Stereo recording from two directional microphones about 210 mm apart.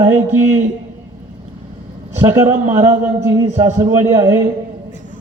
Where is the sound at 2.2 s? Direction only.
15° right (ahead or behind).